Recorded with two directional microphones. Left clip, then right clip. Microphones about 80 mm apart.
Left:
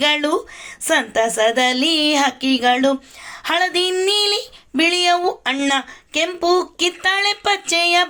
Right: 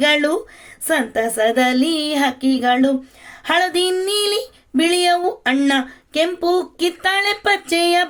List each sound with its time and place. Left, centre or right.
0.0 s speech: right